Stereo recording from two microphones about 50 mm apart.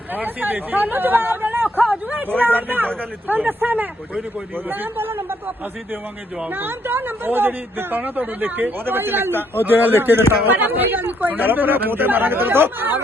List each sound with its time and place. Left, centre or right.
0.1 s a man's voice: right
6.5 s speech: right